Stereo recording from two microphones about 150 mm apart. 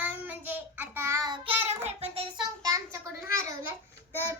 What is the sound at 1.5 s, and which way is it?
Child singing, 40° right (ahead or behind).